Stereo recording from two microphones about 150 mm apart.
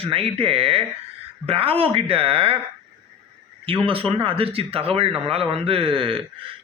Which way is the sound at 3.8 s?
35° right (ahead or behind).